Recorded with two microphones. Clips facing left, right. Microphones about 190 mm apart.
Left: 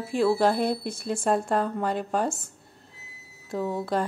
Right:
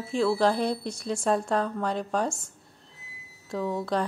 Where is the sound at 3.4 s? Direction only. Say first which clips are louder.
Left 1 dB; 5° left (ahead or behind).